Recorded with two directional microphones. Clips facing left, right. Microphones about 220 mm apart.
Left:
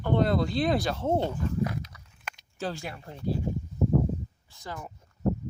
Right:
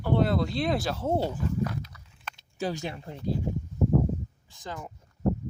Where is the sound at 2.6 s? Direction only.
15° right (ahead or behind).